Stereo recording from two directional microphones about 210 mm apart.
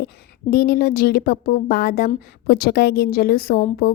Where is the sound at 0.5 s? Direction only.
45° left (ahead or behind).